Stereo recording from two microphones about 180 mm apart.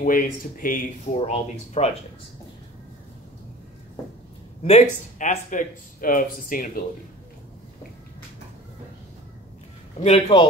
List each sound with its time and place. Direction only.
0.0 s speech: 50° left (ahead or behind)
1.3 s speech: 35° left (ahead or behind)
5.2 s speech: 45° left (ahead or behind)
10.0 s speech: 35° left (ahead or behind)